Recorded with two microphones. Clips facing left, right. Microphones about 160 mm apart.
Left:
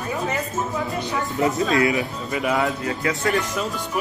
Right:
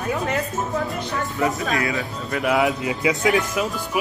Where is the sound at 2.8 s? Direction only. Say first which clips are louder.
Right 3 dB; 15° right (ahead or behind).